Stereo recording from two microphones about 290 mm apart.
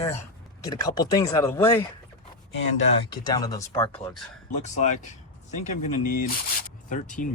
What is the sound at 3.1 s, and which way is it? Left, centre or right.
Speech, centre.